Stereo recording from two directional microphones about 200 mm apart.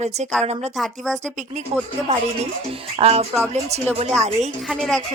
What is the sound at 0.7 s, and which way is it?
Speech, centre (ahead or behind).